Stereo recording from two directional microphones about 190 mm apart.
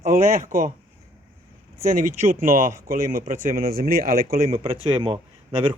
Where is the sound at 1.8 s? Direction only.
45° right (ahead or behind).